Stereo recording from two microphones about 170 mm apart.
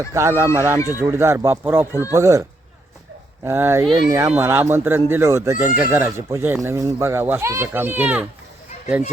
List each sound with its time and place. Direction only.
0.1 s speech: 15° right (ahead or behind)